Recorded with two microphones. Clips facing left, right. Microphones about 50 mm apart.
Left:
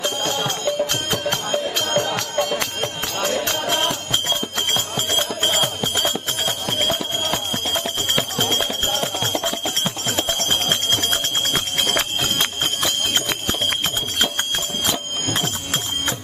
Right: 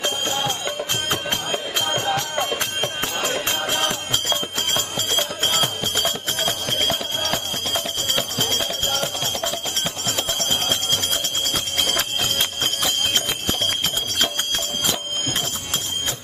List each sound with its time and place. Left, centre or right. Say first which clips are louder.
0.0 s music: left 1 dB; right
4.1 s music: left 1 dB; left
5.1 s music: left 1 dB; centre
7.7 s music: left 1 dB; left
10.4 s music: left 2 dB; left